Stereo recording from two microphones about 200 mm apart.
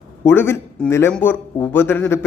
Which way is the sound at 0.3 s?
10° left (ahead or behind).